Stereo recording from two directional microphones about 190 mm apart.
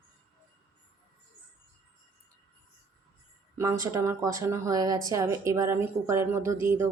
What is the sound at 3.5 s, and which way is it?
Speech, 15° right (ahead or behind).